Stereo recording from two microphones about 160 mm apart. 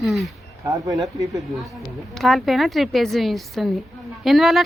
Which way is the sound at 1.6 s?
Centre (ahead or behind).